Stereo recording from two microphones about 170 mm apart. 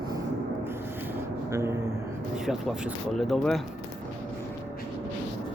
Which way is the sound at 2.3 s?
5° right (ahead or behind).